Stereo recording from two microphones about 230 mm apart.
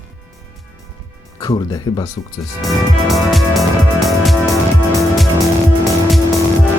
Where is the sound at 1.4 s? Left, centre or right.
Centre.